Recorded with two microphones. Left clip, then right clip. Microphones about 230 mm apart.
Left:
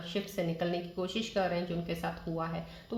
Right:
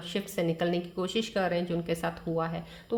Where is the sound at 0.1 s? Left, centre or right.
Right.